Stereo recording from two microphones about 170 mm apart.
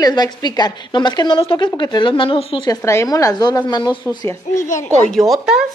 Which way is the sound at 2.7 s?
15° left (ahead or behind).